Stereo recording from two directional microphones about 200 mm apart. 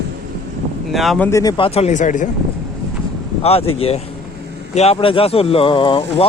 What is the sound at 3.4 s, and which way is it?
Speech, 30° left (ahead or behind).